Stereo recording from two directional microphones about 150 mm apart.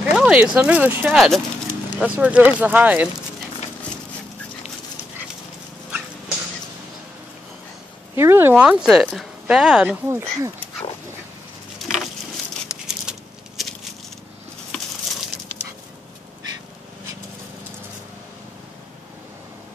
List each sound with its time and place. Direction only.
0.1 s speech: 5° right (ahead or behind)
1.1 s speech: centre (ahead or behind)
5.9 s dog: 5° right (ahead or behind)
8.2 s speech: 15° right (ahead or behind)
10.0 s speech: 20° right (ahead or behind)
13.1 s a sound: 5° right (ahead or behind)
14.7 s a sound: 5° left (ahead or behind)